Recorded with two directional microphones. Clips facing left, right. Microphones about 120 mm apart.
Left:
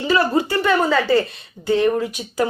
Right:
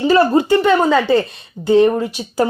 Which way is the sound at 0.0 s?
30° right (ahead or behind).